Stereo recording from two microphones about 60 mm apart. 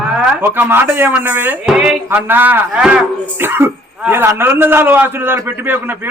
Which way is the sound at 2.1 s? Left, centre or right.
Right.